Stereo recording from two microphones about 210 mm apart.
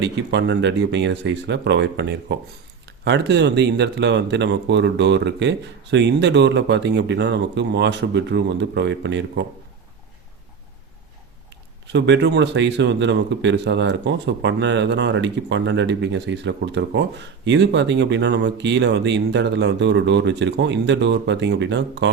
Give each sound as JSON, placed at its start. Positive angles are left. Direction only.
{"t": 0.0, "sound": "speech", "side_deg": -55}
{"t": 11.9, "sound": "speech", "side_deg": -55}